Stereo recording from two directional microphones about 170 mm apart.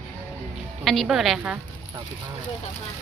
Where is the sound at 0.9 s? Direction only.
Centre (ahead or behind).